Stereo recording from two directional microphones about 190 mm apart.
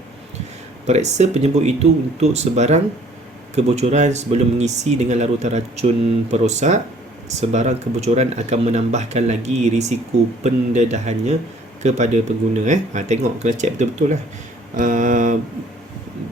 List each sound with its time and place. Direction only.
0.9 s speech: 35° right (ahead or behind)
14.8 s mantra: 45° right (ahead or behind)